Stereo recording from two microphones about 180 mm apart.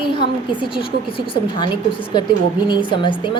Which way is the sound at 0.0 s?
25° left (ahead or behind).